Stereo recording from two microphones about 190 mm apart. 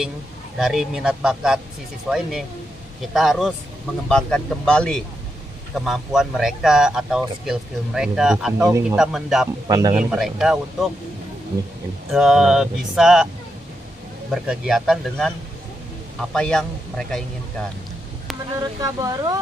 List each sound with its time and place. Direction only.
0.6 s speech: centre (ahead or behind)
9.7 s speech: 20° right (ahead or behind)
9.9 s speech: 5° right (ahead or behind)
12.1 s speech: 5° right (ahead or behind)
14.3 s speech: centre (ahead or behind)
16.3 s speech: 5° left (ahead or behind)
18.6 s speech: 20° right (ahead or behind)